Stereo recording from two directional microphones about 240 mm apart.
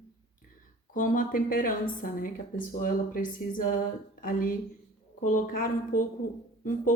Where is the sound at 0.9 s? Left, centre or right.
Left.